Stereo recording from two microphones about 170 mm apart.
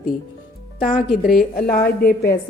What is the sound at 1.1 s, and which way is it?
A woman's voice, 60° left (ahead or behind).